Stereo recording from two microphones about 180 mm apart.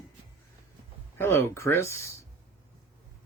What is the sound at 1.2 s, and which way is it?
Speech, 15° left (ahead or behind).